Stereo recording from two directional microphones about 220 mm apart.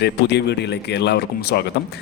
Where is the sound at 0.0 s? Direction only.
50° left (ahead or behind).